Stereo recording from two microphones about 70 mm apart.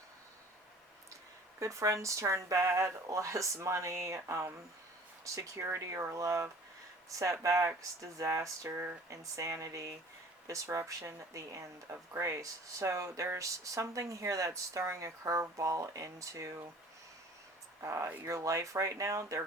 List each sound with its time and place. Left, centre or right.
1.5 s speech: right
17.7 s speech: right